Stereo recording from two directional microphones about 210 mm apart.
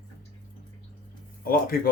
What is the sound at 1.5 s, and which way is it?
Speech, 45° left (ahead or behind).